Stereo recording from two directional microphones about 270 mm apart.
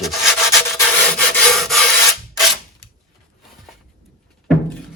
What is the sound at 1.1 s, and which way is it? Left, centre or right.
Wood, centre.